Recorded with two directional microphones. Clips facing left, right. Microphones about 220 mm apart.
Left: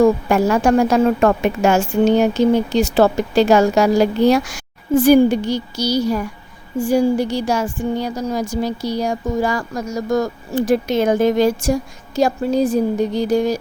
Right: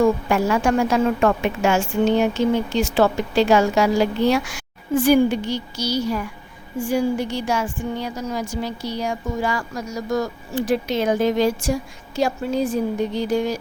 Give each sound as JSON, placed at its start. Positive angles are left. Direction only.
{"t": 0.0, "sound": "a woman's voice", "side_deg": 40}